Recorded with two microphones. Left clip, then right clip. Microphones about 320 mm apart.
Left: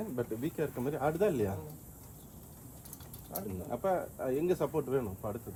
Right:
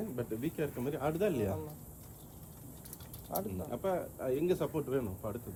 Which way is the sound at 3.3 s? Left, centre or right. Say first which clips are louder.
Right 5 dB; right.